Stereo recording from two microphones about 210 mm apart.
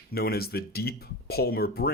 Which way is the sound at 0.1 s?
45° left (ahead or behind).